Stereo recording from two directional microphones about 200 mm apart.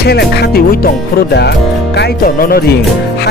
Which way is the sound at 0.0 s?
55° left (ahead or behind).